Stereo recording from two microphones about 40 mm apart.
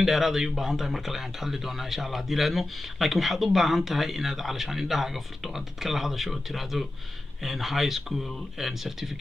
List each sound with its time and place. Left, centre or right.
0.0 s speech: centre